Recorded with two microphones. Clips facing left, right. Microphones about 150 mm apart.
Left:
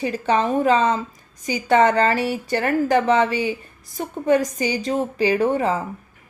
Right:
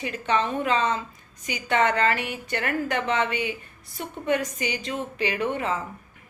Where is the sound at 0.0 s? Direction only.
35° left (ahead or behind).